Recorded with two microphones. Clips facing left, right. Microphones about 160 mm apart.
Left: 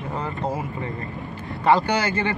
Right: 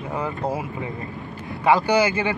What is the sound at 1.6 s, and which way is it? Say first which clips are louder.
Speech: right 2 dB; 10° right (ahead or behind).